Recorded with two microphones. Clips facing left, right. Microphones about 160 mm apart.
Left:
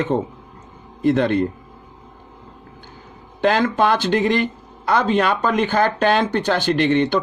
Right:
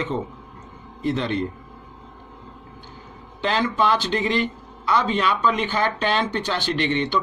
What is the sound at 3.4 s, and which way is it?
Speech, 50° left (ahead or behind).